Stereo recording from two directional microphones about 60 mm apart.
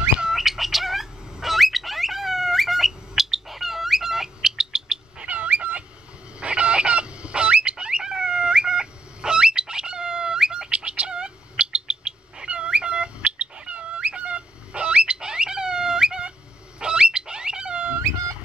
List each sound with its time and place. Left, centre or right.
0.2 s bird: centre
5.3 s dog: right
6.4 s dog: centre
10.7 s bird: right
16.8 s a sound: centre